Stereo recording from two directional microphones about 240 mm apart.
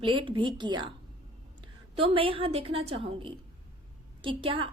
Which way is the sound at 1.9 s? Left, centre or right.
Right.